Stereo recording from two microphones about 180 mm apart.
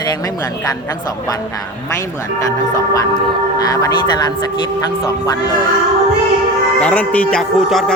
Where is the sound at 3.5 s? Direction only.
20° left (ahead or behind).